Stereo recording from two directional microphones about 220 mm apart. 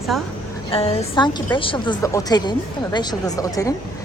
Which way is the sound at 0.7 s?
30° left (ahead or behind).